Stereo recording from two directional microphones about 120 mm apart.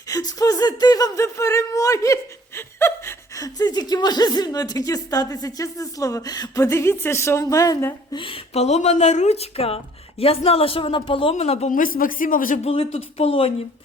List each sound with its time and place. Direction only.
0.1 s speech: 30° left (ahead or behind)
8.1 s speech: 45° left (ahead or behind); by 11.7 s 60° left (ahead or behind)
12.0 s speech: 90° left
12.6 s speech: 55° left (ahead or behind)